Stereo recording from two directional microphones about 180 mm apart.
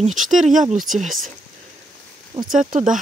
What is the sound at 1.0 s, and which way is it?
Speech, centre (ahead or behind).